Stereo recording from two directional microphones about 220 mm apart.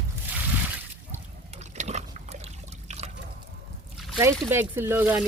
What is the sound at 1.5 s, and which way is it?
Liquid, 30° right (ahead or behind).